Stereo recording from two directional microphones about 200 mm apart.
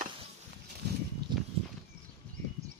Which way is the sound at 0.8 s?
55° right (ahead or behind).